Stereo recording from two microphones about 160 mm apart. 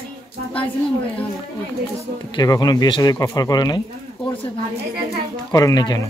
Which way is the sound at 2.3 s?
25° left (ahead or behind).